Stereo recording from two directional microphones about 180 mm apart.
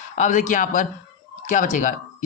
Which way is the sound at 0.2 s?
45° left (ahead or behind).